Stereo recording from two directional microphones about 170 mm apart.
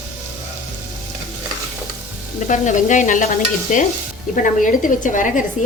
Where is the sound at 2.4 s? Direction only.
45° left (ahead or behind).